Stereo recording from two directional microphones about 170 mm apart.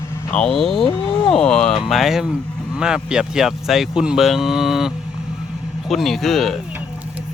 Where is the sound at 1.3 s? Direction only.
5° left (ahead or behind).